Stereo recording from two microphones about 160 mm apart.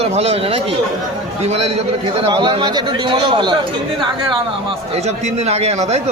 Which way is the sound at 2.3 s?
30° right (ahead or behind).